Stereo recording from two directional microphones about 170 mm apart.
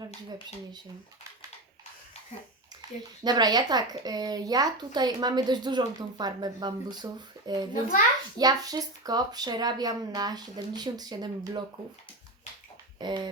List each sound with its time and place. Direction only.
3.2 s speech: 25° right (ahead or behind)
7.7 s a child's voice: 55° left (ahead or behind)
8.4 s speech: 20° right (ahead or behind)
13.0 s speech: 25° right (ahead or behind)